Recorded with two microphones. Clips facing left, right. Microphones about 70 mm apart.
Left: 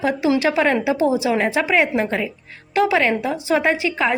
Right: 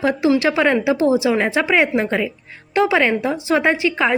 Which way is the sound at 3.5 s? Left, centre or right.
Centre.